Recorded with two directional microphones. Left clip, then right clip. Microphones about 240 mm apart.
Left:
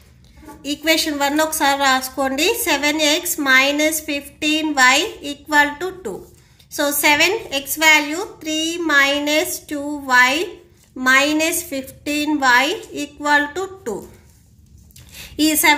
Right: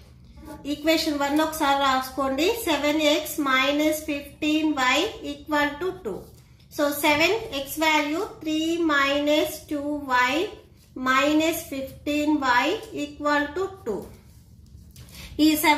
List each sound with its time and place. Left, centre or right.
0.7 s a woman's voice: left
15.3 s a woman's voice: left